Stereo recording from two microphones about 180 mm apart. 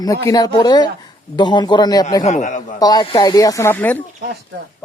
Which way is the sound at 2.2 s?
45° left (ahead or behind).